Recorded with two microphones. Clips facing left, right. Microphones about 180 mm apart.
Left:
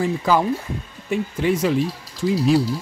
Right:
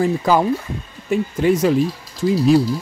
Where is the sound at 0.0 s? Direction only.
45° right (ahead or behind).